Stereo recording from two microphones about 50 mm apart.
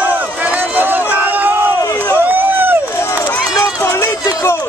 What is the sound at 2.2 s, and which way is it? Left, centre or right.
Run, right.